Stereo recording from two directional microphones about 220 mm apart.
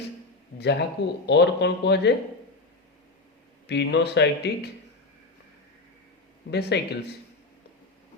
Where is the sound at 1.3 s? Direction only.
50° left (ahead or behind).